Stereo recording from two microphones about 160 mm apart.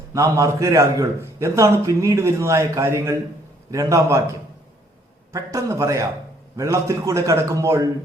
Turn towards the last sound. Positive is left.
turn(degrees=-20)  # may be behind; listen again after turning